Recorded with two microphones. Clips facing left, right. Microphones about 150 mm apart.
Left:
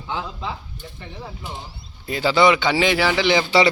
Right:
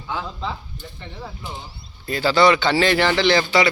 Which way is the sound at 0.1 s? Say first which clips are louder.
Right 1 dB; 20° left (ahead or behind).